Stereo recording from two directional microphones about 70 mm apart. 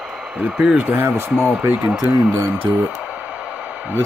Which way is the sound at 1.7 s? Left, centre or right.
Centre.